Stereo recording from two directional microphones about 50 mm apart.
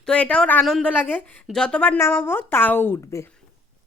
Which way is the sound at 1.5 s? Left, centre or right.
Centre.